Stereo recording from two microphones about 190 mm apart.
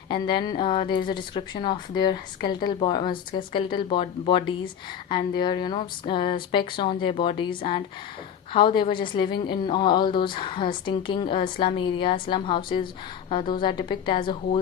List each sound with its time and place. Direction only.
0.1 s speech: 25° left (ahead or behind)